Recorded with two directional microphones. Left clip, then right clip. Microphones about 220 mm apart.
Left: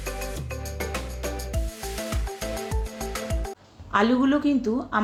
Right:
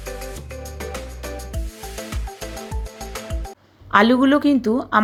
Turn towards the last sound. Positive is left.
turn(degrees=-40)  # may be behind; listen again after turning